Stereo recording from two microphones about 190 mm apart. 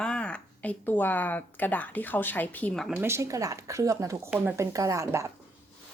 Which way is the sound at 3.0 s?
15° right (ahead or behind).